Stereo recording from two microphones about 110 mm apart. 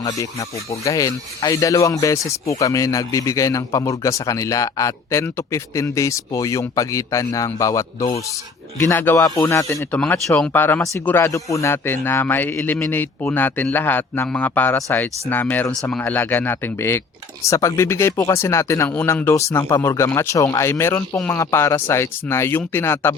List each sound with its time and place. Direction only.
0.0 s speech: 30° left (ahead or behind)
8.8 s speech: 20° left (ahead or behind)
9.9 s speech: 15° left (ahead or behind)